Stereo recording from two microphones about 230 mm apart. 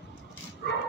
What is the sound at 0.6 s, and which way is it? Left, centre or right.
Dog, left.